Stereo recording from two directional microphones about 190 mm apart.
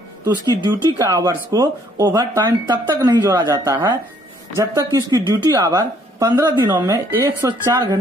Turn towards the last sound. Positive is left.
turn(degrees=-20)  # may be behind; listen again after turning